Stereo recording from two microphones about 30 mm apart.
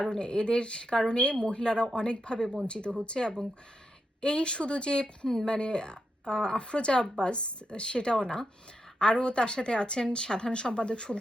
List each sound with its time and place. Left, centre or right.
0.0 s speech: left